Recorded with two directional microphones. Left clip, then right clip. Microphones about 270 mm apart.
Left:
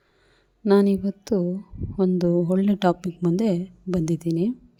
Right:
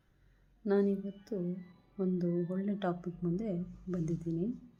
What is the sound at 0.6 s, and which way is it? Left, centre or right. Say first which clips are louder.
A woman's voice: left 12 dB; left.